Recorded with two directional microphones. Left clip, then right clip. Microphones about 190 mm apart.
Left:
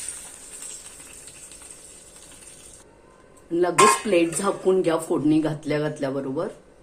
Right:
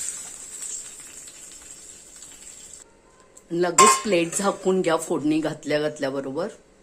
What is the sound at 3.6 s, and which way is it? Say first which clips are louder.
Dishes: right 1 dB; 35° right (ahead or behind).